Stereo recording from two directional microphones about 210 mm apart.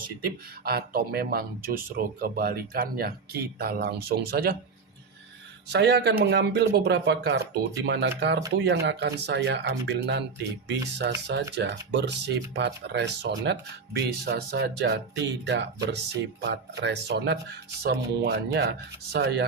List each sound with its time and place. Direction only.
0.3 s speech: 45° right (ahead or behind)
5.6 s speech: 50° right (ahead or behind)